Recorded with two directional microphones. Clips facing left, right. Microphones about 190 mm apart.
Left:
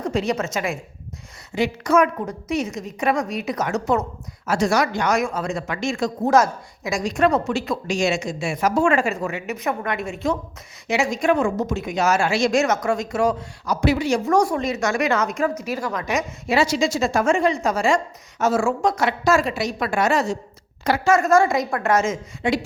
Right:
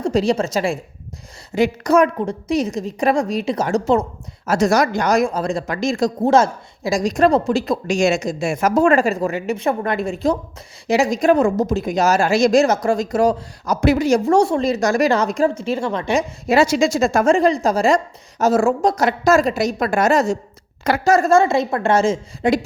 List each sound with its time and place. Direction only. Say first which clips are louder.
0.0 s speech: right 5 dB; 35° right (ahead or behind)
1.5 s speech: right 4 dB; 45° right (ahead or behind)
4.4 s speech: right 4 dB; 40° right (ahead or behind)
14.3 s speech: right 4 dB; 25° right (ahead or behind)
16.5 s speech: right 4 dB; 45° right (ahead or behind)
17.3 s a woman's voice: right 4 dB; 35° right (ahead or behind); by 21.1 s 50° right (ahead or behind)
21.1 s speech: right 3 dB; 30° right (ahead or behind)
22.4 s speech: right 5 dB; 40° right (ahead or behind)